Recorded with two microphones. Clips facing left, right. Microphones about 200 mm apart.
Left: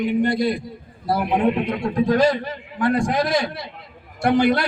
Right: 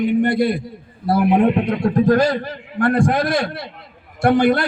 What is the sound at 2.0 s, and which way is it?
A man's voice, 55° right (ahead or behind).